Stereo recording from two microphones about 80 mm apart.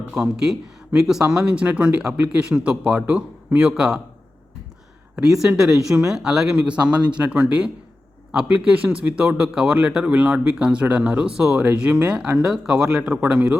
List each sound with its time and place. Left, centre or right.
0.1 s speech: centre
5.1 s speech: centre